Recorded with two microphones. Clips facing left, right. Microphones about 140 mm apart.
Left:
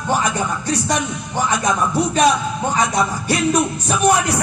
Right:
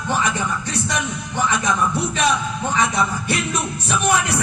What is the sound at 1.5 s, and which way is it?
A man's voice, 40° left (ahead or behind).